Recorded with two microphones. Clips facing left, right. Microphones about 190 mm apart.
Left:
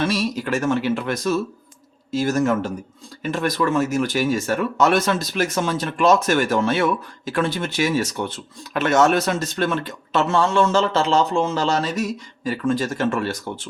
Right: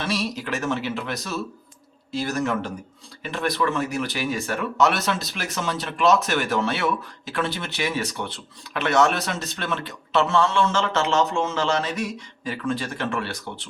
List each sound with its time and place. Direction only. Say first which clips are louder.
0.0 s speech: left 5 dB; 50° left (ahead or behind)